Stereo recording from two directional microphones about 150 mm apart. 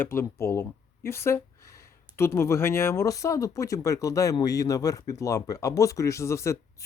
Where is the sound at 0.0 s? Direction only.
15° left (ahead or behind).